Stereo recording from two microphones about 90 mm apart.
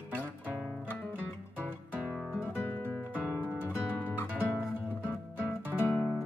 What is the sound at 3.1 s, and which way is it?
Music, 15° right (ahead or behind).